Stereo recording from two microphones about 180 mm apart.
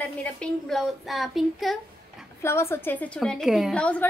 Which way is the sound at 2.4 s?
15° left (ahead or behind).